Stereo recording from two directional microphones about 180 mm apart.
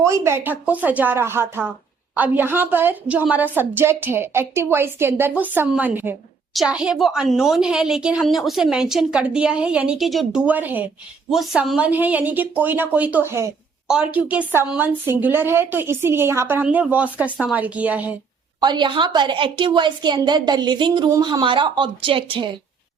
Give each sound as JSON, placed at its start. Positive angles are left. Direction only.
{"t": 0.0, "sound": "a woman's voice", "side_deg": -15}
{"t": 18.6, "sound": "a woman's voice", "side_deg": -25}